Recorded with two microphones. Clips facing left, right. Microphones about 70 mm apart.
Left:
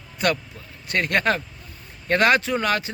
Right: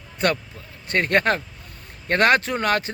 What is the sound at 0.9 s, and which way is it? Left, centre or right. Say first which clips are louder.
Speech: right 2 dB; right.